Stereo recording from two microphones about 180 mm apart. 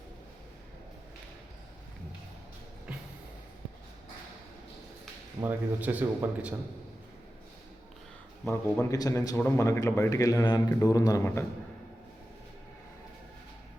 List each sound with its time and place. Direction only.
5.4 s speech: 10° right (ahead or behind)
8.4 s a man's voice: 15° left (ahead or behind)